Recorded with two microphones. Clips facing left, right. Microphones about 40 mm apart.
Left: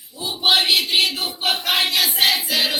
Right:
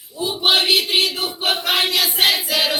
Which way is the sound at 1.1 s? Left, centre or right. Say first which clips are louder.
Right 1 dB; right.